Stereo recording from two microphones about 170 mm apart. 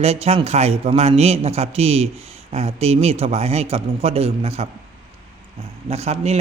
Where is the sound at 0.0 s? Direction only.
35° right (ahead or behind).